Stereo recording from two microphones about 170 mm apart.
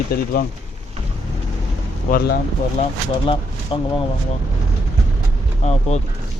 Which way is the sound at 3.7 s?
30° left (ahead or behind).